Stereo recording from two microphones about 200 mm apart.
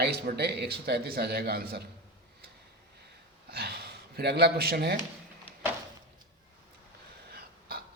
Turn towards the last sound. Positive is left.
turn(degrees=-50)  # may be behind; listen again after turning